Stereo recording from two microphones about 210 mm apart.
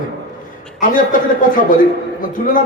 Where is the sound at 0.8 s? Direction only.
40° left (ahead or behind).